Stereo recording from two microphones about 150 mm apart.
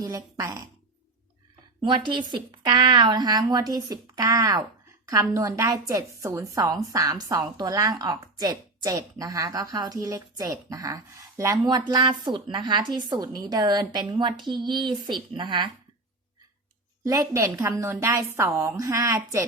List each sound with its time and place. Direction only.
0.0 s a woman's voice: 20° right (ahead or behind)
1.8 s a woman's voice: 30° right (ahead or behind)
17.1 s a woman's voice: 20° right (ahead or behind)